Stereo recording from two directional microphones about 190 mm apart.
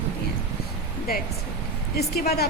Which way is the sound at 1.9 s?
55° left (ahead or behind).